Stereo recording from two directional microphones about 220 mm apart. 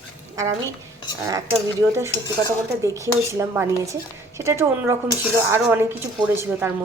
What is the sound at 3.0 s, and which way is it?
Speech, 15° right (ahead or behind).